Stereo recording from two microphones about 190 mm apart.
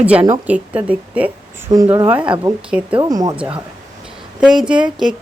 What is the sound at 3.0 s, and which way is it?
Speech, 20° right (ahead or behind).